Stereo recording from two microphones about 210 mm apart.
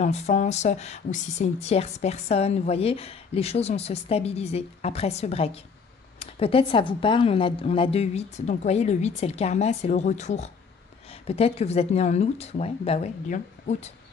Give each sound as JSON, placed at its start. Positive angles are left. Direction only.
{"t": 0.0, "sound": "speech", "side_deg": 35}